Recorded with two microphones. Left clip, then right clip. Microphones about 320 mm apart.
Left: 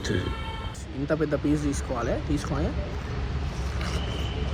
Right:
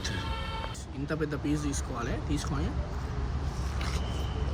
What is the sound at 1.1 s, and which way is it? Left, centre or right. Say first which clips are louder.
Speech: left 7 dB; left.